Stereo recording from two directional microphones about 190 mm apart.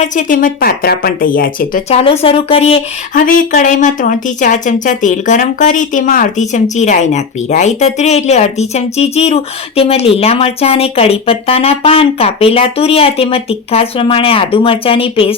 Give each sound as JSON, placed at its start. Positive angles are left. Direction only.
{"t": 0.0, "sound": "speech", "side_deg": 45}
{"t": 1.9, "sound": "a woman's voice", "side_deg": 30}
{"t": 3.2, "sound": "a woman's voice", "side_deg": 45}